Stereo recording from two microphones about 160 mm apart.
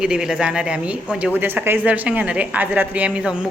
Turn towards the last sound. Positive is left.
turn(degrees=-5)  # may be behind; listen again after turning